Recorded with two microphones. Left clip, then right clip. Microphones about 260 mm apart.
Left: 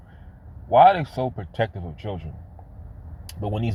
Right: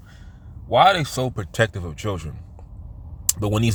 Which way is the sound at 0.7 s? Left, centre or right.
Right.